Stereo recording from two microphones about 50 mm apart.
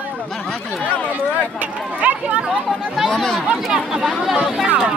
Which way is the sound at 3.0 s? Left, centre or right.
Centre.